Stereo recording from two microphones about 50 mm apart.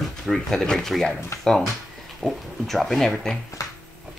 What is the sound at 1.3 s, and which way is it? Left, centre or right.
Speech, left.